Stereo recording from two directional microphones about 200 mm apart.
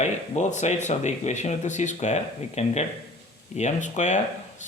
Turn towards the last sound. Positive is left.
turn(degrees=35)  # may be behind; listen again after turning